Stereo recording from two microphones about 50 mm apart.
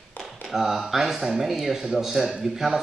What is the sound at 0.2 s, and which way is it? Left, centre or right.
Speech, centre.